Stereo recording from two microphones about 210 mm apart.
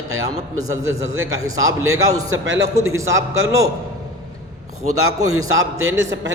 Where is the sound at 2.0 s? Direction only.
15° right (ahead or behind).